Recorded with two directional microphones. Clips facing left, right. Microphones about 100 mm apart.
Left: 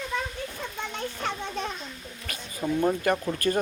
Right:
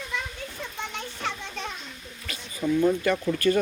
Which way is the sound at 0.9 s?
40° left (ahead or behind).